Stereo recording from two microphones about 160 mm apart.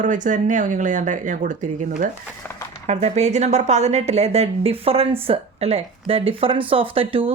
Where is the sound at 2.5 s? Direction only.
10° left (ahead or behind).